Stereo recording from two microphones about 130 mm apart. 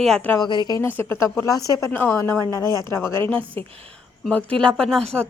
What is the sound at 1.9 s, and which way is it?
Speech, 15° left (ahead or behind).